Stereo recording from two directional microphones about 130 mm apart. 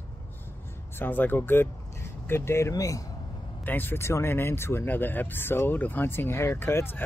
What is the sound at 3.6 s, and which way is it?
Speech, 15° left (ahead or behind).